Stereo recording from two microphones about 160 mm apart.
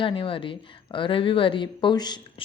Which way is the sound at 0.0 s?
35° left (ahead or behind).